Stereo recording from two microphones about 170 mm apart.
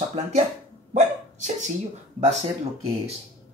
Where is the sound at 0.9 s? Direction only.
45° right (ahead or behind).